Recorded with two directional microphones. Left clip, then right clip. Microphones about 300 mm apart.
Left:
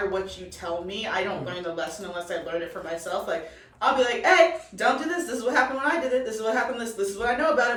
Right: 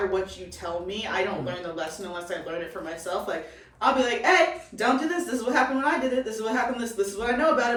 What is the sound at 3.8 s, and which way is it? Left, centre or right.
A woman's voice, centre.